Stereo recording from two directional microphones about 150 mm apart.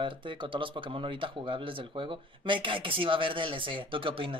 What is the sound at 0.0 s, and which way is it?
Speech, 35° right (ahead or behind).